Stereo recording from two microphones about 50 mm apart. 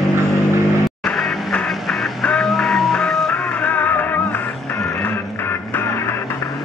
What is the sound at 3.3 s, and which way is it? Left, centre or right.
Music, left.